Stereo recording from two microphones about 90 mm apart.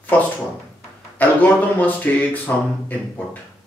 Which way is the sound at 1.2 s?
15° left (ahead or behind).